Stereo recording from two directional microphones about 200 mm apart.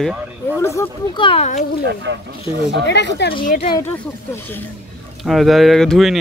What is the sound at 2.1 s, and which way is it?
Speech, 60° right (ahead or behind).